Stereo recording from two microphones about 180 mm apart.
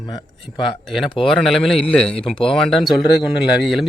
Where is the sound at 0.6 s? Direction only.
Centre (ahead or behind).